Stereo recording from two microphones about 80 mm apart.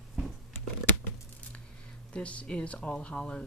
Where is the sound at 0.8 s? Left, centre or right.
Left.